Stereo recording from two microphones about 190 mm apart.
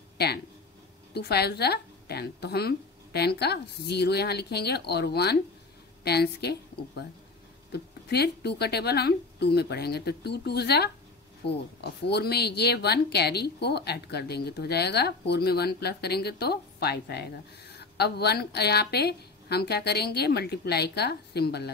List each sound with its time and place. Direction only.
1.1 s a woman's voice: 60° left (ahead or behind)